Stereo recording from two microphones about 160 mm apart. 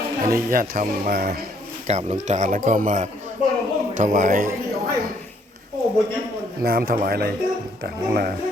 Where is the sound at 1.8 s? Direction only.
45° right (ahead or behind).